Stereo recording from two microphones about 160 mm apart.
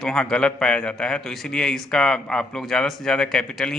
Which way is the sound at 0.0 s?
5° left (ahead or behind).